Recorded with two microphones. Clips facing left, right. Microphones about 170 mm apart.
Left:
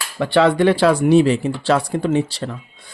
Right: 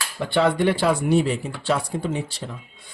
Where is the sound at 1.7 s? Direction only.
80° left.